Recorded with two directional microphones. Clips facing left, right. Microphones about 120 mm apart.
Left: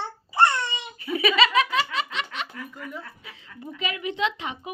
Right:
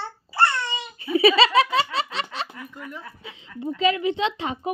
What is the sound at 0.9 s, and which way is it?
Laughter, 30° right (ahead or behind).